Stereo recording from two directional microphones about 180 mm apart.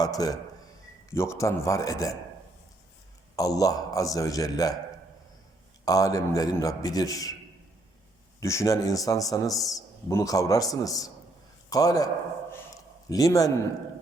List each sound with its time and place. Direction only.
0.0 s a man's voice: 20° left (ahead or behind)
3.3 s a man's voice: 20° left (ahead or behind)
5.8 s a man's voice: 20° left (ahead or behind)
8.4 s a man's voice: 15° left (ahead or behind)
12.7 s a sound: 20° left (ahead or behind)